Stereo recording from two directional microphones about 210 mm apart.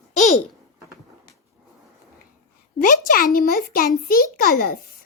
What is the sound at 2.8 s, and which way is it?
A child's voice, 40° left (ahead or behind).